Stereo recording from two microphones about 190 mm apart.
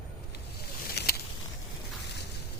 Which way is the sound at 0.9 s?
55° left (ahead or behind).